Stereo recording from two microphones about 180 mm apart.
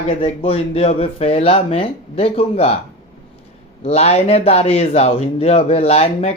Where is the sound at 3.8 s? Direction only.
35° left (ahead or behind).